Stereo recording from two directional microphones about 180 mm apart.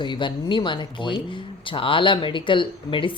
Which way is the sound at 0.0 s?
25° left (ahead or behind).